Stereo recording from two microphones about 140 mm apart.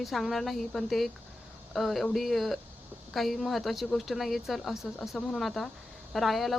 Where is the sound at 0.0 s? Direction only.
Centre (ahead or behind).